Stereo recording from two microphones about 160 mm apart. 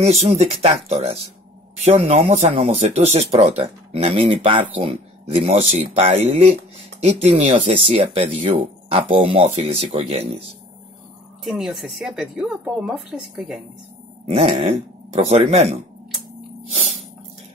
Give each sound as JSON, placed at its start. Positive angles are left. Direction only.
{"t": 0.4, "sound": "speech", "side_deg": -40}
{"t": 11.4, "sound": "speech", "side_deg": 0}
{"t": 14.2, "sound": "speech", "side_deg": -40}